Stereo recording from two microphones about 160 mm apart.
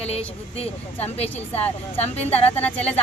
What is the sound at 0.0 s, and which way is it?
Speech, 40° left (ahead or behind).